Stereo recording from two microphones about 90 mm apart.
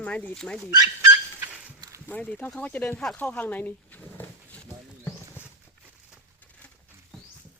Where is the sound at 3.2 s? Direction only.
20° left (ahead or behind).